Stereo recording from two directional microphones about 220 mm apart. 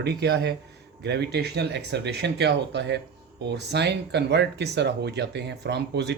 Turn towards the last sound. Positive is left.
turn(degrees=-50)  # may be behind; listen again after turning